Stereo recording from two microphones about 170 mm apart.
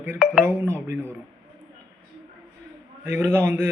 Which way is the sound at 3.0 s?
15° right (ahead or behind).